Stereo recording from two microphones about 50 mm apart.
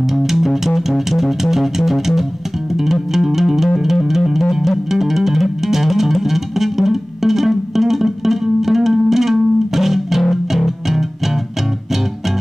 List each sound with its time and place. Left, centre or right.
0.1 s music: centre